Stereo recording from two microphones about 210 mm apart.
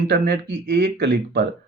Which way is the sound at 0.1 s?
50° right (ahead or behind).